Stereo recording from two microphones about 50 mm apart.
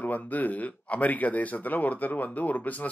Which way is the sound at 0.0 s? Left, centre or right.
Left.